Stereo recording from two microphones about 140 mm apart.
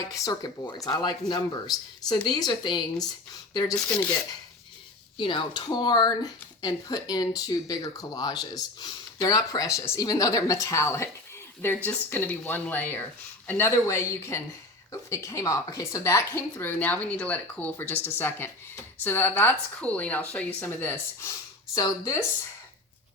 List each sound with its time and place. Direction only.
0.1 s speech: 25° left (ahead or behind)
5.1 s speech: 35° left (ahead or behind)